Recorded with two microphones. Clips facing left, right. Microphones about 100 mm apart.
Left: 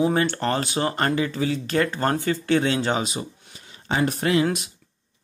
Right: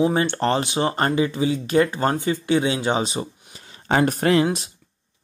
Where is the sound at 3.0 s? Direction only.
30° right (ahead or behind).